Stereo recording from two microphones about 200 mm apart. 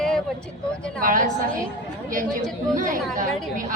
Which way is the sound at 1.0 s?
40° right (ahead or behind).